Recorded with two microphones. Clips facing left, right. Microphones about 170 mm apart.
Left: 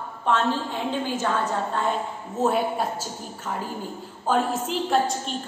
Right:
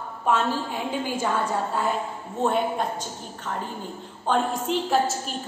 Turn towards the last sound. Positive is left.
turn(degrees=0)  # may be behind; listen again after turning